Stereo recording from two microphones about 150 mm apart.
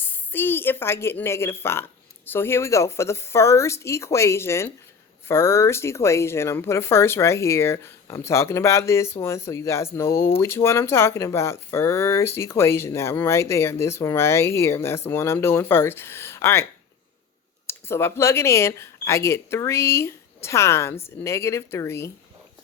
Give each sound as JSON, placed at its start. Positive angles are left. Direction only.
{"t": 0.0, "sound": "speech", "side_deg": 15}
{"t": 17.7, "sound": "speech", "side_deg": 15}